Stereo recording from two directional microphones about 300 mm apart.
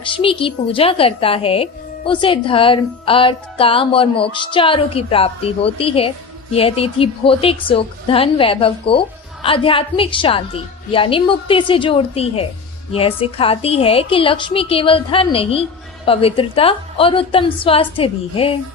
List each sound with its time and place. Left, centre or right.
0.0 s speech: centre